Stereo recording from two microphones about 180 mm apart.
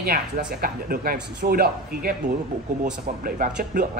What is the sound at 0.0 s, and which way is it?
Speech, 55° right (ahead or behind).